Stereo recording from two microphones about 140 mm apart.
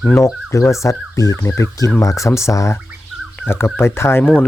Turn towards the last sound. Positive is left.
turn(degrees=15)  # may be behind; listen again after turning